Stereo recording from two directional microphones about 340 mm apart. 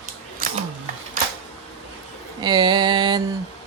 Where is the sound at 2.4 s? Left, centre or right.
Centre.